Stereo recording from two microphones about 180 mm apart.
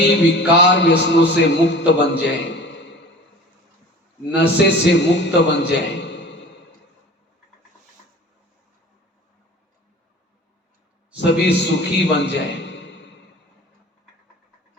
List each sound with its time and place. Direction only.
0.0 s a man's voice: 75° left (ahead or behind)
4.5 s a man's voice: 70° left (ahead or behind)
11.1 s a man's voice: 70° left (ahead or behind)